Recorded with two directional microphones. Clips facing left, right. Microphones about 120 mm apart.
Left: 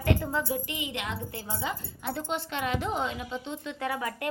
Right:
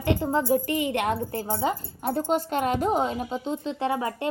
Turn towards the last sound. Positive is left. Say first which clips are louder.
# right 5 dB
turn(degrees=-25)  # may be behind; listen again after turning